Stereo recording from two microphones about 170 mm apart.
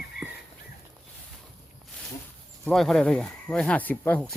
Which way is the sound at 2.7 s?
Centre (ahead or behind).